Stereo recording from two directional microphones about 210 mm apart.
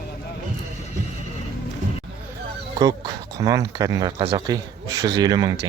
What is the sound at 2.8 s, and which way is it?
Speech, 15° right (ahead or behind).